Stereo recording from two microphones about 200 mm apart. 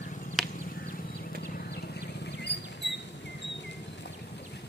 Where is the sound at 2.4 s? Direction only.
60° left (ahead or behind).